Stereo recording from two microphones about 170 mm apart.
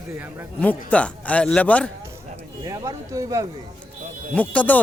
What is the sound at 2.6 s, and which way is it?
Speech, 20° right (ahead or behind).